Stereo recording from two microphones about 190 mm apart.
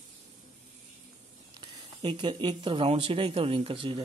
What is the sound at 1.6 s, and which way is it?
Speech, 25° right (ahead or behind).